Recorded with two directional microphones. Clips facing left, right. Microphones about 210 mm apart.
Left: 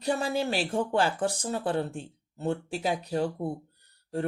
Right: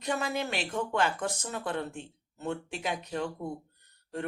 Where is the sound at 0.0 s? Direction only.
30° left (ahead or behind).